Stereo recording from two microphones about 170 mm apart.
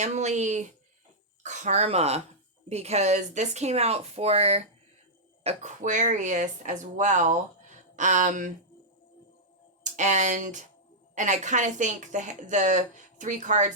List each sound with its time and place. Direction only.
0.0 s a woman's voice: 40° right (ahead or behind)
9.9 s a woman's voice: 45° right (ahead or behind)